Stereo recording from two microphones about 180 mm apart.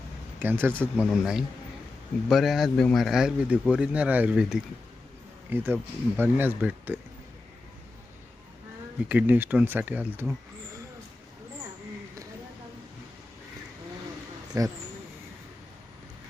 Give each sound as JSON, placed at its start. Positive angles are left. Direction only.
{"t": 0.3, "sound": "speech", "side_deg": -10}
{"t": 9.0, "sound": "speech", "side_deg": -10}
{"t": 14.5, "sound": "speech", "side_deg": -20}